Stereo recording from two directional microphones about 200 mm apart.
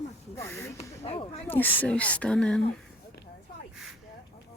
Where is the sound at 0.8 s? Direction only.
30° left (ahead or behind).